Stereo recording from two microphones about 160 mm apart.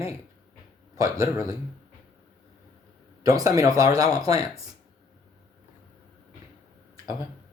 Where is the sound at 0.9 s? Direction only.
20° right (ahead or behind).